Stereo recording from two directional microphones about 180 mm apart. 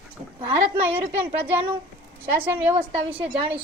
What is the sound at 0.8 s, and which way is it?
A woman's voice, 10° right (ahead or behind).